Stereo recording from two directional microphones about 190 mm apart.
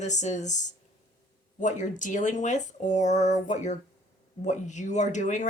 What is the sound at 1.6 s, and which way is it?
Speech, 40° left (ahead or behind).